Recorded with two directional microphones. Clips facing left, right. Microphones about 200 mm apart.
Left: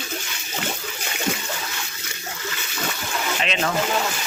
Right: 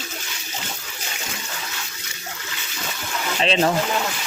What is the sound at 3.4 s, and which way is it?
Speech, 30° right (ahead or behind).